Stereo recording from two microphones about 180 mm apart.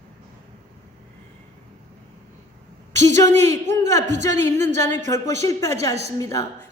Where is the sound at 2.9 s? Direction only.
15° left (ahead or behind).